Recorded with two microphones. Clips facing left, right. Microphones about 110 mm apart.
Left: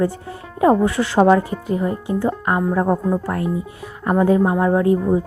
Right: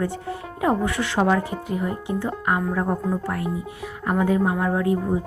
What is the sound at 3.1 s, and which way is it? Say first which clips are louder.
A woman's voice: left 5 dB; 40° left (ahead or behind).